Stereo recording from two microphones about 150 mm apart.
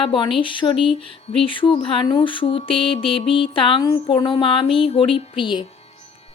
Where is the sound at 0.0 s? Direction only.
35° left (ahead or behind).